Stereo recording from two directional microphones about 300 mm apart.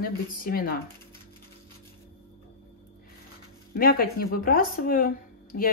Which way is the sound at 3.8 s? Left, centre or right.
Left.